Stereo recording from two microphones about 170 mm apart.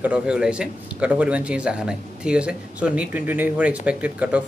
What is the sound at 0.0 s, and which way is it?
A man's voice, 5° right (ahead or behind).